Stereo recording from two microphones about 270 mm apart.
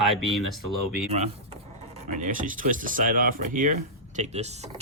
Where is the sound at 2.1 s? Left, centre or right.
Right.